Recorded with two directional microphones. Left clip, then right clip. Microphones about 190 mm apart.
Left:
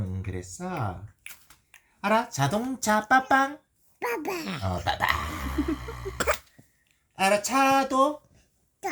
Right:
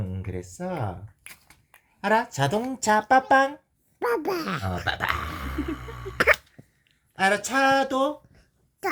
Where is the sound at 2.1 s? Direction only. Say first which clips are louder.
Right 2 dB; 20° left (ahead or behind).